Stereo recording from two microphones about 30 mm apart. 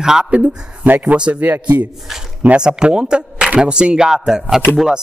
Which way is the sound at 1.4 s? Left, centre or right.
Right.